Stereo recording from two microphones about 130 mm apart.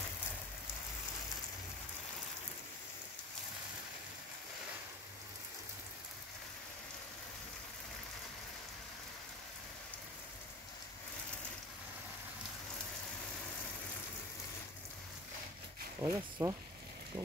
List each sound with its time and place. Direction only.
16.0 s speech: 25° right (ahead or behind)